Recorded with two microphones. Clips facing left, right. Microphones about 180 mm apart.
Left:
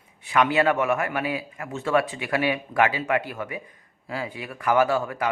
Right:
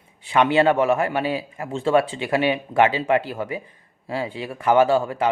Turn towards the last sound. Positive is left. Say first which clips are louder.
# right 4 dB
turn(degrees=-30)  # may be behind; listen again after turning